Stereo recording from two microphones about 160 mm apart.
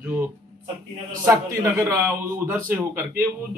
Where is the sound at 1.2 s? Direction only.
20° right (ahead or behind).